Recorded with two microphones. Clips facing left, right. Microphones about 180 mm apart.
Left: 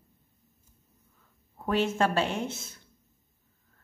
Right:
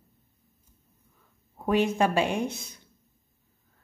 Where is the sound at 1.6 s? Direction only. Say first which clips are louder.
Right 3 dB; 15° right (ahead or behind).